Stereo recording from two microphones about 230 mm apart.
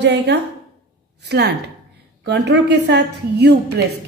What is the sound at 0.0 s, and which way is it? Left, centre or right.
A woman's voice, right.